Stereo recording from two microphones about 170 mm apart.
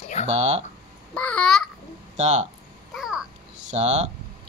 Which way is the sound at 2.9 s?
5° right (ahead or behind).